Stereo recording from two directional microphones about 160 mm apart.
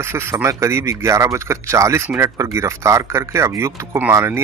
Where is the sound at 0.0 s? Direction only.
15° right (ahead or behind).